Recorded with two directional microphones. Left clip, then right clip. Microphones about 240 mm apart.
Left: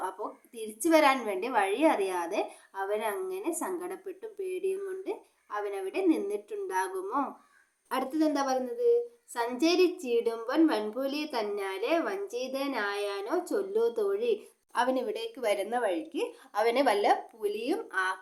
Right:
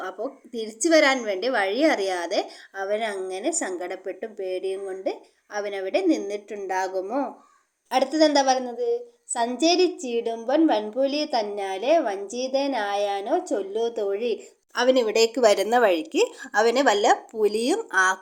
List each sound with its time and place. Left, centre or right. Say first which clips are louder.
0.0 s a woman's voice: right 4 dB; centre